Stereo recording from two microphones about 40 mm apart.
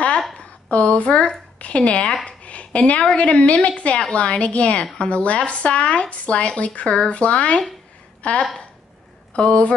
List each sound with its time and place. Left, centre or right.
0.7 s a woman's voice: left
2.2 s a sound: left
3.2 s a woman's voice: left